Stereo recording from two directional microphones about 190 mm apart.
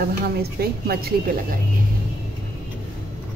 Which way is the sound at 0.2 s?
55° right (ahead or behind).